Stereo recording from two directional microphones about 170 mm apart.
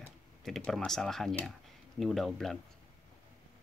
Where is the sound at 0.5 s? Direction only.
Centre (ahead or behind).